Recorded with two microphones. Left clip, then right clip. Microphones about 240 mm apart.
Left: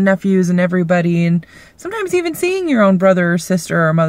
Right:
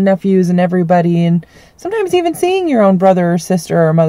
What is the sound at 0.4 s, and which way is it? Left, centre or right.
A woman's voice, right.